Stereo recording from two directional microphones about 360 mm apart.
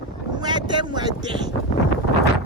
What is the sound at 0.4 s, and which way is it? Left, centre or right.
Speech, centre.